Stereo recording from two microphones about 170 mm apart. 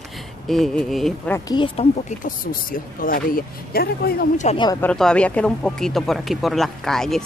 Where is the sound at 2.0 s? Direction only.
55° left (ahead or behind).